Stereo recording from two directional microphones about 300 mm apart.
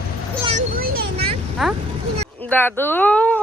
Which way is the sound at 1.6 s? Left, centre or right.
Centre.